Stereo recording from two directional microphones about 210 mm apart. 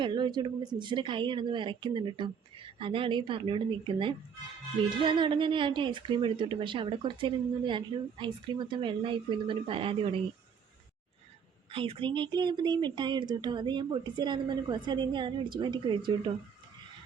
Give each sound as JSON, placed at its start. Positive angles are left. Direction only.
{"t": 0.0, "sound": "a woman's voice", "side_deg": -20}
{"t": 11.7, "sound": "a woman's voice", "side_deg": -25}